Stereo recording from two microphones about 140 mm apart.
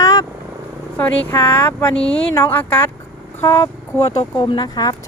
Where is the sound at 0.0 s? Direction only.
25° left (ahead or behind).